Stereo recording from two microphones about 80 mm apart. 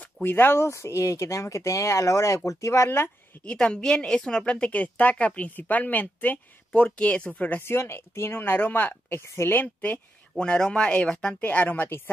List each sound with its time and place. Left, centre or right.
0.0 s speech: left
3.4 s a woman's voice: centre